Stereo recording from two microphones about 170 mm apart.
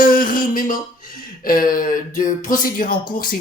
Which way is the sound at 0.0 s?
55° left (ahead or behind).